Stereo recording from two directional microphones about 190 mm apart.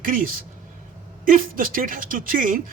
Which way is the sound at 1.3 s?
45° right (ahead or behind).